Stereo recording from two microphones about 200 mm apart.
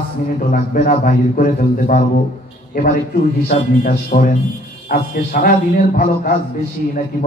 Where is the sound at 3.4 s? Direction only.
45° left (ahead or behind).